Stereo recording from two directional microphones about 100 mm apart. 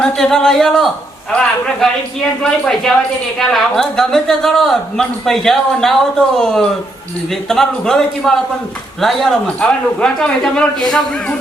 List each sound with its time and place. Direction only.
0.0 s a woman's voice: 5° left (ahead or behind)